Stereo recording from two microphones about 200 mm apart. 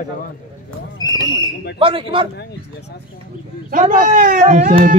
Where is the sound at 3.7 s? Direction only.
40° right (ahead or behind).